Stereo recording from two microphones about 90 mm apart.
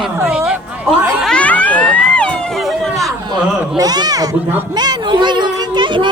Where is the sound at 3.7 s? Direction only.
45° right (ahead or behind).